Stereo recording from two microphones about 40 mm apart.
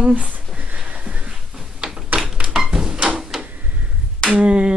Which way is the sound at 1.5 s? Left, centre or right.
Centre.